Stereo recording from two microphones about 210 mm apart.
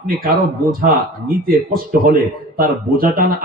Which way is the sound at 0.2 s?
45° right (ahead or behind).